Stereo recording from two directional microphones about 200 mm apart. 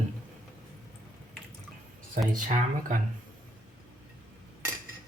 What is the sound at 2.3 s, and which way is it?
Speech, 40° right (ahead or behind).